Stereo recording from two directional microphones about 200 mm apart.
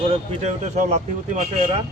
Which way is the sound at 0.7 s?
35° right (ahead or behind).